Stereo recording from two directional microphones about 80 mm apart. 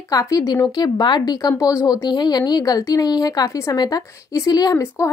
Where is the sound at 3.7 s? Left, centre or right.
Left.